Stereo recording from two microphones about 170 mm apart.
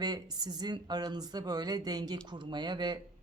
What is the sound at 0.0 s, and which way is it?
Speech, 25° right (ahead or behind).